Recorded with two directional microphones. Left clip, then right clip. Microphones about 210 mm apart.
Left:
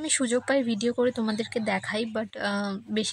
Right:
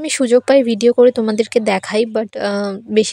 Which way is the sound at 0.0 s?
35° right (ahead or behind).